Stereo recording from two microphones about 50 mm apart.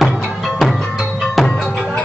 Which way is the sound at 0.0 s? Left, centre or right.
Centre.